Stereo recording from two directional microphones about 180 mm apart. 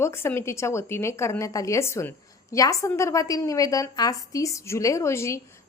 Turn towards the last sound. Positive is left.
turn(degrees=15)  # may be behind; listen again after turning